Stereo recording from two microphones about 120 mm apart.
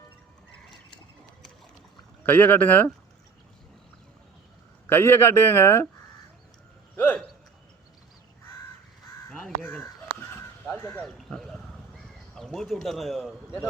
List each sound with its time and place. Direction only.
2.2 s speech: 15° left (ahead or behind)
4.9 s a man's voice: 20° left (ahead or behind)
6.9 s speech: 15° left (ahead or behind)
9.3 s crow: 5° left (ahead or behind)
9.8 s chicken: 20° left (ahead or behind)
11.0 s a sound: 5° left (ahead or behind)